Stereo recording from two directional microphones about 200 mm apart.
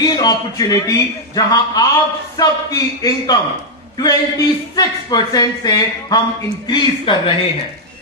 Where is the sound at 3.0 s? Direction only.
15° left (ahead or behind).